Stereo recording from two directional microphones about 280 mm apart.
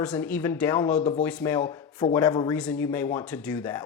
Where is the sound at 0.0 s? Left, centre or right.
Centre.